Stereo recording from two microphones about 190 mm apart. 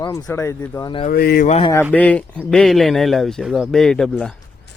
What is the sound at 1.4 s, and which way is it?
Speech, 35° left (ahead or behind).